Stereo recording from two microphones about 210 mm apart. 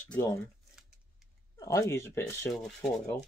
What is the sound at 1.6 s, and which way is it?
Speech, 15° left (ahead or behind).